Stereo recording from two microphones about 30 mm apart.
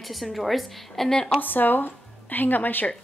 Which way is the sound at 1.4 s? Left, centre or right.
Left.